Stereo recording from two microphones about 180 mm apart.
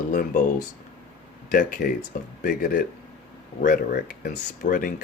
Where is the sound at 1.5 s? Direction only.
50° left (ahead or behind).